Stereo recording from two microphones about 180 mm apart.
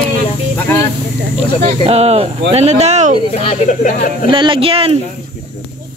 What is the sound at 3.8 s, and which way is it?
Speech, 45° left (ahead or behind).